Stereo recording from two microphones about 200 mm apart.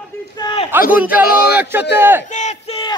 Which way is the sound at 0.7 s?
10° right (ahead or behind).